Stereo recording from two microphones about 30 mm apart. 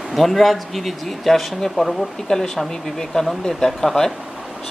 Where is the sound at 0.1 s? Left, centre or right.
Centre.